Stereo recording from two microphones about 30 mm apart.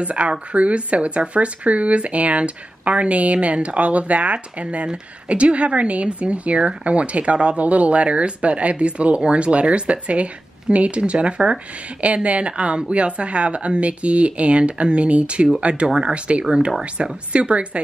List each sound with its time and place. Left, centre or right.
0.0 s speech: right
12.0 s speech: right